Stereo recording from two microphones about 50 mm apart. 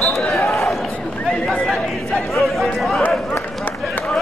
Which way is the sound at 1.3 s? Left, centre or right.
Centre.